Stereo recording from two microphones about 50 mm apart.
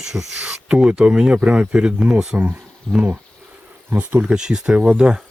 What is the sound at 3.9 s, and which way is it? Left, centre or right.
Speech, right.